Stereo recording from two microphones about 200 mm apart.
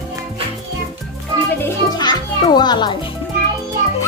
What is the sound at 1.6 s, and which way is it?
Music, 20° left (ahead or behind).